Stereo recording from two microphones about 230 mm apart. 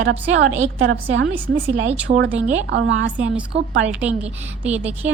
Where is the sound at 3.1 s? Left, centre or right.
Centre.